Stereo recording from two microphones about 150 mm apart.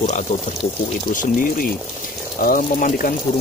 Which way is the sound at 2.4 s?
65° left (ahead or behind).